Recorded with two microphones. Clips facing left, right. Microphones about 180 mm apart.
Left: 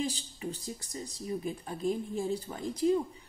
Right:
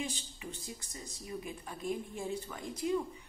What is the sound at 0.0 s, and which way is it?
A woman's voice, 35° left (ahead or behind).